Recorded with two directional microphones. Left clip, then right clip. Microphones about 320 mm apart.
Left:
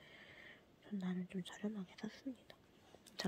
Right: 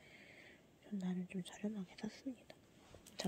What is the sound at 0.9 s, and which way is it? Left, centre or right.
Speech, centre.